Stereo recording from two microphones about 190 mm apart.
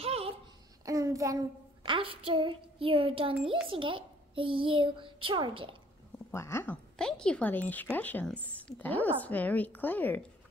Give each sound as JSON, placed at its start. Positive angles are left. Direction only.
{"t": 0.0, "sound": "a sound", "side_deg": -30}
{"t": 0.8, "sound": "child singing", "side_deg": -15}
{"t": 1.8, "sound": "a child's voice", "side_deg": -25}
{"t": 6.3, "sound": "speech", "side_deg": 15}